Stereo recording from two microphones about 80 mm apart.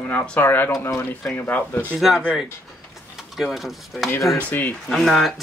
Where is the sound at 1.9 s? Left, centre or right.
Centre.